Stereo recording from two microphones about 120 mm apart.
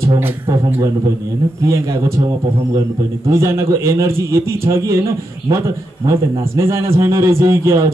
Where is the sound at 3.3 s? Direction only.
25° right (ahead or behind).